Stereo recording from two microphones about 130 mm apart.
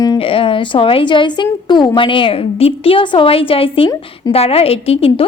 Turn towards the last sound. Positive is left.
turn(degrees=45)  # may be behind; listen again after turning